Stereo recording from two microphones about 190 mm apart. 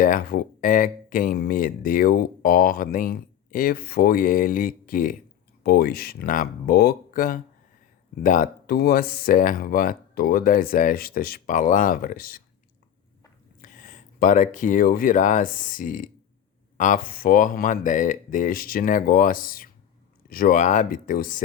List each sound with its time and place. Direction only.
0.0 s speech: 50° left (ahead or behind)
13.6 s speech: 45° left (ahead or behind)